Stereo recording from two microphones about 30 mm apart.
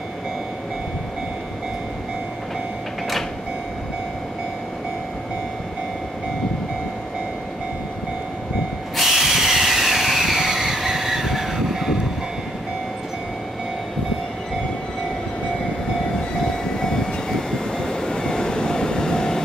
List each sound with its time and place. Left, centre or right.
9.0 s vehicle: centre
16.8 s train: left